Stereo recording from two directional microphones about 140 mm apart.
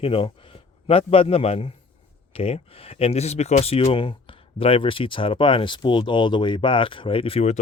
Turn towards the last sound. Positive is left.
turn(degrees=50)  # may be behind; listen again after turning